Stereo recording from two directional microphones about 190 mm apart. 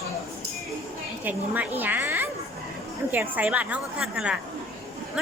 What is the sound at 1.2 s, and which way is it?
A woman's voice, 10° right (ahead or behind).